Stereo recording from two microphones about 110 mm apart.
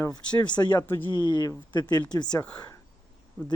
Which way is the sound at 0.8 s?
20° left (ahead or behind).